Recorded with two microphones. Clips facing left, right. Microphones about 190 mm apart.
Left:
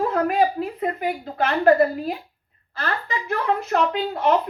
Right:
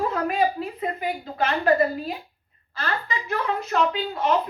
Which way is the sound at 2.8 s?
60° left (ahead or behind).